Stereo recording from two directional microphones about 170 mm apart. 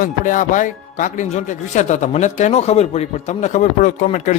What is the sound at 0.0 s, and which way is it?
Speech, 50° left (ahead or behind).